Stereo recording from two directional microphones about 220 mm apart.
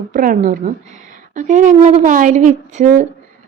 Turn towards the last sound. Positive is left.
turn(degrees=-35)  # may be behind; listen again after turning